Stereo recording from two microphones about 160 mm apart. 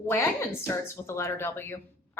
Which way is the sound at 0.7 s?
15° left (ahead or behind).